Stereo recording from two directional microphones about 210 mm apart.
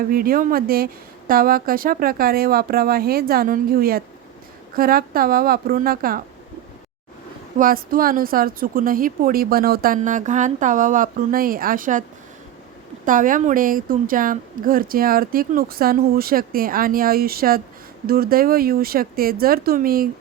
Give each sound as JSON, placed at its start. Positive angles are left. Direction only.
{"t": 0.1, "sound": "a woman's voice", "side_deg": -45}
{"t": 7.6, "sound": "a woman's voice", "side_deg": -45}
{"t": 13.1, "sound": "a woman's voice", "side_deg": -40}